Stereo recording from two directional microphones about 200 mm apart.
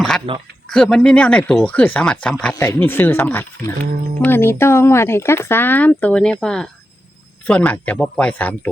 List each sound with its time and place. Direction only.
0.3 s speech: 25° right (ahead or behind)
0.7 s speech: 5° left (ahead or behind)